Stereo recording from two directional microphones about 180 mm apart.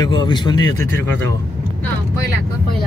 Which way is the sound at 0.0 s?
25° left (ahead or behind).